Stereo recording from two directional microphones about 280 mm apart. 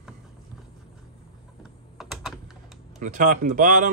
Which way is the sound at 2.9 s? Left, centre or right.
Right.